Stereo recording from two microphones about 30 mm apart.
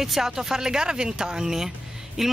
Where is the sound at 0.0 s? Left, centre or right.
Centre.